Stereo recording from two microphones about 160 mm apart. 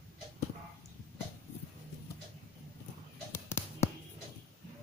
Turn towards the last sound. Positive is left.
turn(degrees=15)  # may be behind; listen again after turning